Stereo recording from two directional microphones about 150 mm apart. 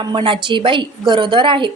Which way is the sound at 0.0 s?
30° right (ahead or behind).